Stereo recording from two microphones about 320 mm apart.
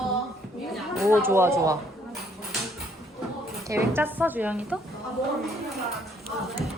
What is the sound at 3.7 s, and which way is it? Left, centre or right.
A woman's voice, centre.